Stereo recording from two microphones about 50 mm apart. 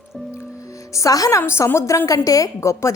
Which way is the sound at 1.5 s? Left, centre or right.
Left.